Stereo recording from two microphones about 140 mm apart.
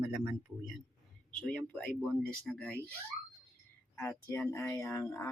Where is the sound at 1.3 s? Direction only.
5° left (ahead or behind).